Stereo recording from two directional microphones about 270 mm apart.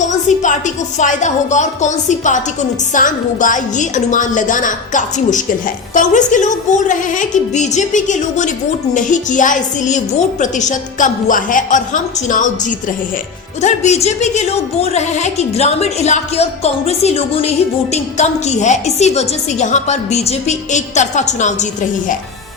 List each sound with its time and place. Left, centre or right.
0.0 s a woman's voice: left